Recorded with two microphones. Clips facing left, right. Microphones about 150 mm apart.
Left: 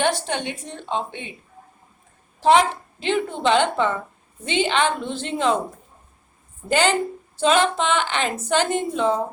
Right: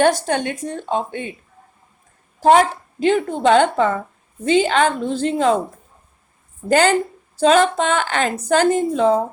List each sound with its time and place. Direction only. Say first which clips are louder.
0.0 s a woman's voice: right 6 dB; 45° right (ahead or behind)
2.4 s a woman's voice: right 3 dB; 45° right (ahead or behind)
6.7 s a woman's voice: right 4 dB; 40° right (ahead or behind)